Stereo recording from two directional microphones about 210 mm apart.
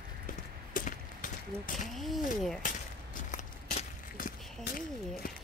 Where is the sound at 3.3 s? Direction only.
35° left (ahead or behind).